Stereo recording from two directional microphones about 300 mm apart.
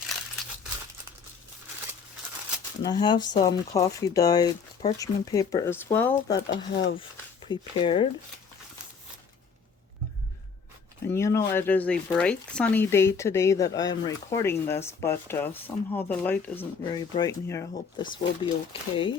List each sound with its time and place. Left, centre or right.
2.8 s speech: centre
7.4 s speech: centre
11.1 s speech: centre